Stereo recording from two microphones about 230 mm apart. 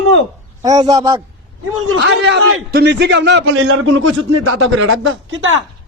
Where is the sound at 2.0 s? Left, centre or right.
Right.